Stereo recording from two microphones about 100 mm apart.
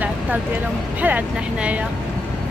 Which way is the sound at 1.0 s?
15° right (ahead or behind).